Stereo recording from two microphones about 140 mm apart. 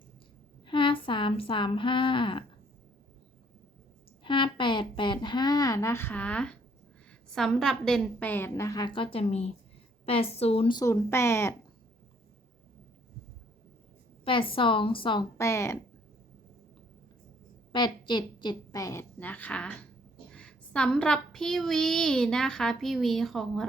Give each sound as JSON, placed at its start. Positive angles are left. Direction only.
{"t": 0.6, "sound": "speech", "side_deg": 35}
{"t": 4.2, "sound": "a woman's voice", "side_deg": 35}
{"t": 8.2, "sound": "a woman's voice", "side_deg": 15}
{"t": 10.8, "sound": "speech", "side_deg": 20}
{"t": 14.3, "sound": "a woman's voice", "side_deg": 40}
{"t": 15.4, "sound": "speech", "side_deg": 20}
{"t": 17.7, "sound": "a woman's voice", "side_deg": 35}